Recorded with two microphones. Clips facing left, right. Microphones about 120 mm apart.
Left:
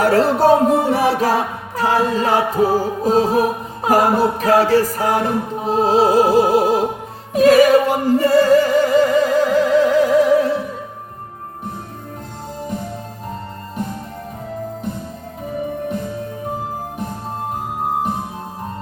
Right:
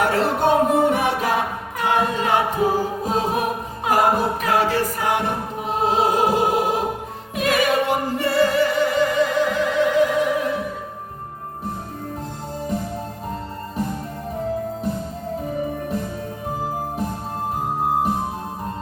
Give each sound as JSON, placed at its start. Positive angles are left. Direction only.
{"t": 0.0, "sound": "music", "side_deg": 35}